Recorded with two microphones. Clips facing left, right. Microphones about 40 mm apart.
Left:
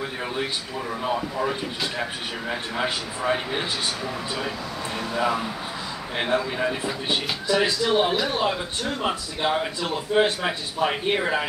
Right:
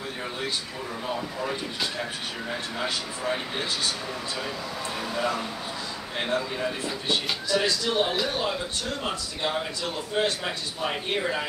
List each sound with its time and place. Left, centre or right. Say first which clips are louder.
1.0 s speech: left 5 dB; left
2.8 s speech: left 4 dB; left
4.9 s speech: left 4 dB; centre
6.1 s speech: left 4 dB; left